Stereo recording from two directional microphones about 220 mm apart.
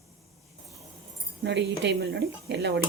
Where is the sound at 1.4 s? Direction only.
55° right (ahead or behind).